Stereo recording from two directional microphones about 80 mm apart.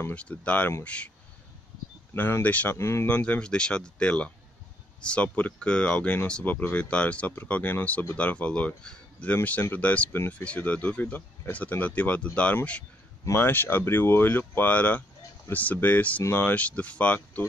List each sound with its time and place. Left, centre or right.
0.1 s speech: centre
2.1 s speech: left
2.8 s speech: left
3.1 s speech: centre
16.5 s speech: centre